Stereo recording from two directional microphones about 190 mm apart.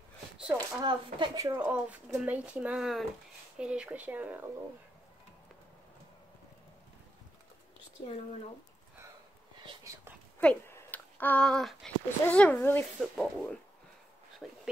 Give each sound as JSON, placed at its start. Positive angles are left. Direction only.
{"t": 0.6, "sound": "speech", "side_deg": -20}
{"t": 10.4, "sound": "speech", "side_deg": 10}
{"t": 12.9, "sound": "speech", "side_deg": 0}